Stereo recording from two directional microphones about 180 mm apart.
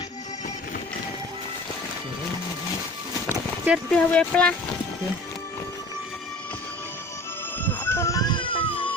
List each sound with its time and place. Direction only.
3.7 s speech: 5° left (ahead or behind)
7.6 s music: 10° left (ahead or behind); by 8.9 s 30° left (ahead or behind)